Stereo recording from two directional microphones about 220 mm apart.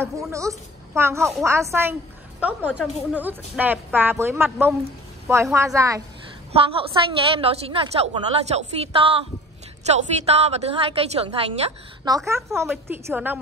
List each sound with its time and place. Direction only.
0.0 s speech: 15° right (ahead or behind)
6.5 s a woman's voice: 25° right (ahead or behind); by 13.4 s 10° right (ahead or behind)